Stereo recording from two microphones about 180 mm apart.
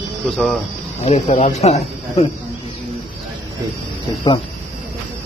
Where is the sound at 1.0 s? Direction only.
40° left (ahead or behind).